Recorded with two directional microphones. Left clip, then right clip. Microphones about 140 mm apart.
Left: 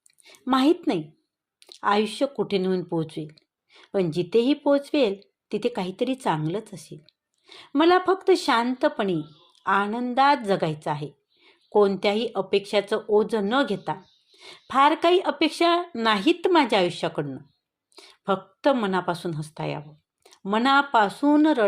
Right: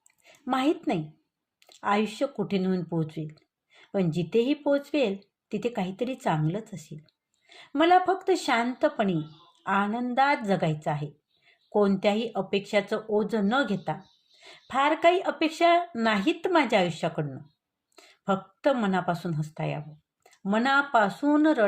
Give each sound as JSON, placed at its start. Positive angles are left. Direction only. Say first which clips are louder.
{"t": 0.4, "sound": "a woman's voice", "louder": "left 5 dB", "side_deg": 35}